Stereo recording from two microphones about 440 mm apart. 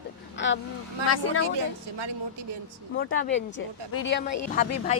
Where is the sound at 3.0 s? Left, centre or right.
Left.